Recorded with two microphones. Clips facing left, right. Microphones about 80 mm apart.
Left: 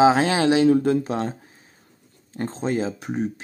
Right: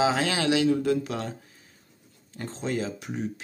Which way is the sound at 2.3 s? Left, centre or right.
Left.